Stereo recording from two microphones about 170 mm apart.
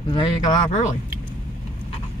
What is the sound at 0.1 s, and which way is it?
Speech, 25° left (ahead or behind).